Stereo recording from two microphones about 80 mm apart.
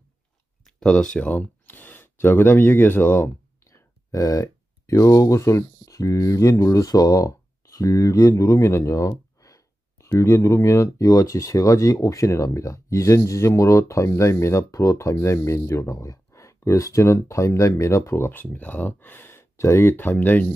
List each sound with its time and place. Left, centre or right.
0.7 s speech: centre; by 3.3 s left
3.7 s speech: left